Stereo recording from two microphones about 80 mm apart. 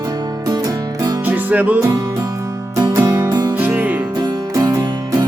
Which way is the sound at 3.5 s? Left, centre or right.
Right.